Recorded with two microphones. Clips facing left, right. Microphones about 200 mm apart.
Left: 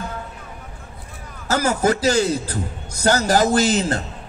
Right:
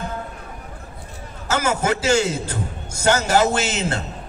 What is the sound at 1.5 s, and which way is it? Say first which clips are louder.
A man's voice: left 2 dB; 35° left (ahead or behind).